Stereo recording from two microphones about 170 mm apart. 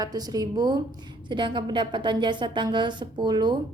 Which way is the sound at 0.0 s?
20° right (ahead or behind).